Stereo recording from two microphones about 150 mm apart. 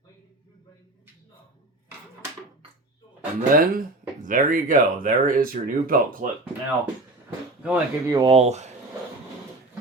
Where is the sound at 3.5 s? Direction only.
65° right (ahead or behind).